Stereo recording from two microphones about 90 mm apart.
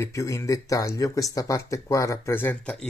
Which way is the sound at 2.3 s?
20° left (ahead or behind).